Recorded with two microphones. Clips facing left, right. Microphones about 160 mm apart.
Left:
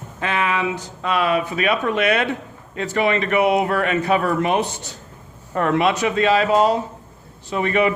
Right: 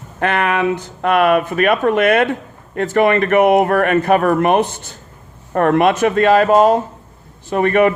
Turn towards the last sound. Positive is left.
turn(degrees=-55)  # may be behind; listen again after turning